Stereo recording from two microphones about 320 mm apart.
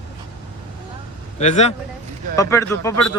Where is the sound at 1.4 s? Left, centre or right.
Left.